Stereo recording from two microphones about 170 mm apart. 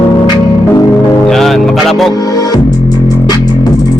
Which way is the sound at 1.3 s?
Centre (ahead or behind).